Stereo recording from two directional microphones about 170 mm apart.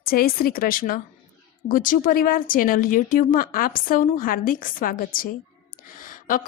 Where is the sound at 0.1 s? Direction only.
60° left (ahead or behind).